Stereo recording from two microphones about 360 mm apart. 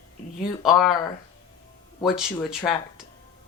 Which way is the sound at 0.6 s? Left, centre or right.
Centre.